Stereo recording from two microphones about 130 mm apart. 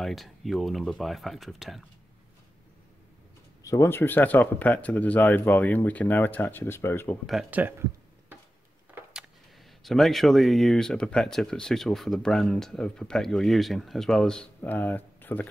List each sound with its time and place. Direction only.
0.0 s speech: centre (ahead or behind)
3.6 s speech: 20° left (ahead or behind)
7.5 s a sound: 15° right (ahead or behind)
9.8 s speech: centre (ahead or behind)